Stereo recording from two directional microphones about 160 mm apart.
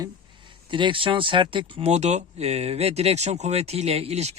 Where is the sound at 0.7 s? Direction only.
30° right (ahead or behind).